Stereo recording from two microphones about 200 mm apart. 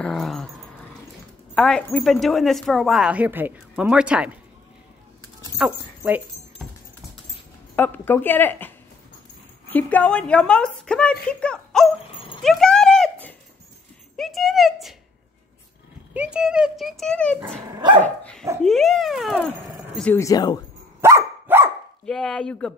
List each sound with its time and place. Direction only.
0.0 s dog: centre (ahead or behind)
1.5 s a woman's voice: 5° left (ahead or behind)
5.6 s speech: 10° right (ahead or behind)
7.7 s a woman's voice: 10° left (ahead or behind)
12.4 s clip-clop: centre (ahead or behind)
14.1 s a sound: centre (ahead or behind)
16.1 s a woman's voice: 5° right (ahead or behind)
20.0 s speech: 10° left (ahead or behind)
21.0 s dog: 15° right (ahead or behind)
22.0 s a woman's voice: 5° left (ahead or behind)